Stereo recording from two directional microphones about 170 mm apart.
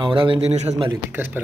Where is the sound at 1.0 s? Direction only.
10° right (ahead or behind).